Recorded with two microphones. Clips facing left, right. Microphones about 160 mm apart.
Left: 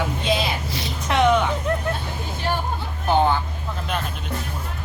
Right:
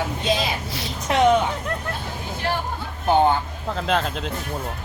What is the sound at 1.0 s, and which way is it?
Speech, 35° right (ahead or behind).